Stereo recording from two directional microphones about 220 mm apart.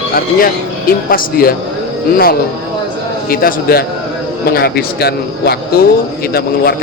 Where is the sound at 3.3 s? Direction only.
40° left (ahead or behind).